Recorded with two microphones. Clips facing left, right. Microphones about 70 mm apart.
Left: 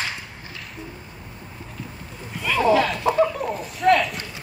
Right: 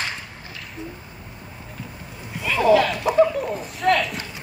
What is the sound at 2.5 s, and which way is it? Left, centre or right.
Chicken, centre.